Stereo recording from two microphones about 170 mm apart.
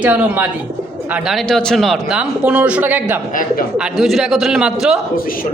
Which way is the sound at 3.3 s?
50° left (ahead or behind).